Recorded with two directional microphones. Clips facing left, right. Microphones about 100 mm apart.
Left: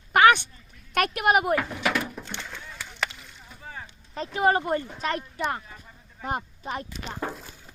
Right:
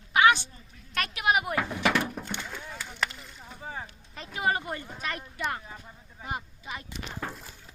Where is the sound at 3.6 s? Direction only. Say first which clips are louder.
Right 2 dB; 20° right (ahead or behind).